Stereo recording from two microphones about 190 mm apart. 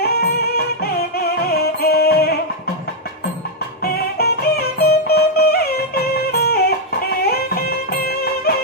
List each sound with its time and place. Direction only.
0.0 s music: 55° left (ahead or behind)
3.8 s music: 55° left (ahead or behind)
7.9 s music: 50° left (ahead or behind)